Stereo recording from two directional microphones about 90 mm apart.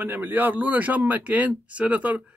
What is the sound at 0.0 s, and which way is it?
Speech, 20° right (ahead or behind).